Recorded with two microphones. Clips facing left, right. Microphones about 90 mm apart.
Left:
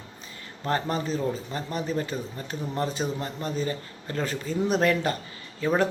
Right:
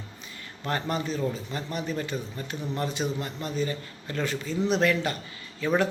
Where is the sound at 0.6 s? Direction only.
35° left (ahead or behind).